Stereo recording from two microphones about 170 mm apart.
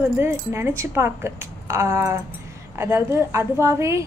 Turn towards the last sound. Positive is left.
turn(degrees=-15)  # may be behind; listen again after turning